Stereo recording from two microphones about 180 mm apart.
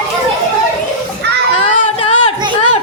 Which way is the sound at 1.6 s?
35° left (ahead or behind).